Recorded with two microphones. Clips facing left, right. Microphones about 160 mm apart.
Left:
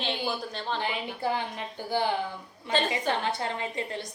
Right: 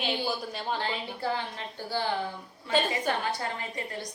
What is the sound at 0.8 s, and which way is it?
A woman's voice, 15° left (ahead or behind).